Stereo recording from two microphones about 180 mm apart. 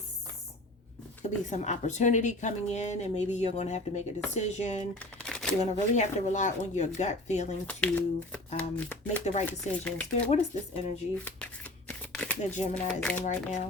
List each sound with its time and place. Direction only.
1.2 s speech: 40° left (ahead or behind)
4.9 s shuffling cards: 5° left (ahead or behind)
5.5 s speech: 40° left (ahead or behind)
7.7 s speech: 10° left (ahead or behind)
10.3 s speech: 40° left (ahead or behind)
11.9 s shuffling cards: 10° left (ahead or behind)
12.4 s speech: 40° left (ahead or behind)
12.7 s speech: 10° left (ahead or behind)
13.2 s speech: 40° left (ahead or behind)